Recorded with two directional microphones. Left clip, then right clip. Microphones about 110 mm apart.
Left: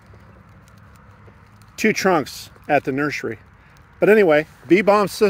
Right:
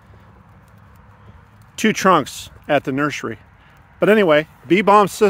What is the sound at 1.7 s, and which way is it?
Speech, 60° right (ahead or behind).